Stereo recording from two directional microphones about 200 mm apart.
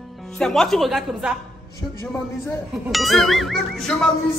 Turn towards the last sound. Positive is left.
turn(degrees=0)  # may be behind; listen again after turning